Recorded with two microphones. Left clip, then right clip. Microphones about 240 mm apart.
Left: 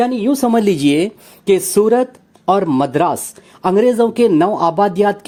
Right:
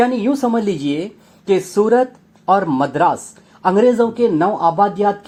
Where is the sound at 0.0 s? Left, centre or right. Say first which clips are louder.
Left 1 dB; left.